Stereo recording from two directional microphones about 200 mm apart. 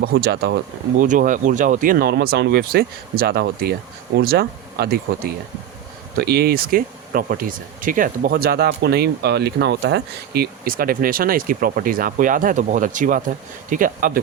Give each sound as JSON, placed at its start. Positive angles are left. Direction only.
{"t": 0.0, "sound": "speech", "side_deg": -55}
{"t": 1.0, "sound": "speech", "side_deg": -40}